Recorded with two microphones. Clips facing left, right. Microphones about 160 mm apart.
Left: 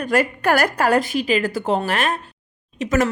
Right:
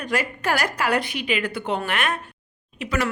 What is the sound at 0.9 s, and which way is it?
A woman's voice, 40° left (ahead or behind).